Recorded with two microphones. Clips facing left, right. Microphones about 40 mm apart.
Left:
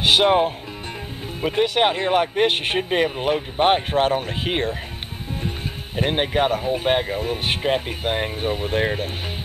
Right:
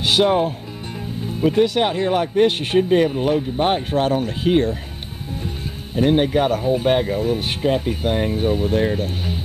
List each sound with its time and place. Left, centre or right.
0.0 s speech: left
5.9 s speech: left